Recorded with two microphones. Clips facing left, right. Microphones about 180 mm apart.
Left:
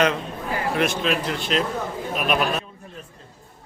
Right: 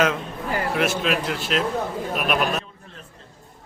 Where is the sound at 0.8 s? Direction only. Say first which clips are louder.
Left 1 dB; 5° right (ahead or behind).